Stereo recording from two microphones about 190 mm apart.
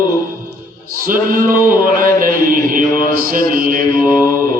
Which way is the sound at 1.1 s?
45° right (ahead or behind).